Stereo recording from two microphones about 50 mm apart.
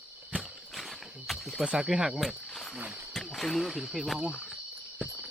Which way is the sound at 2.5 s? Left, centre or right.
Centre.